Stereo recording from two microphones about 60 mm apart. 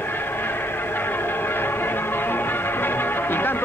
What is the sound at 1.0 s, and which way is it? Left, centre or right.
Music, left.